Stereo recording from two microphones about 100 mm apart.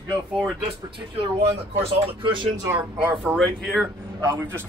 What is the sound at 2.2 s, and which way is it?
Speech, 55° right (ahead or behind).